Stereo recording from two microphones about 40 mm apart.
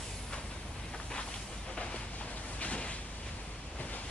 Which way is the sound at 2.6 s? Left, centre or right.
Left.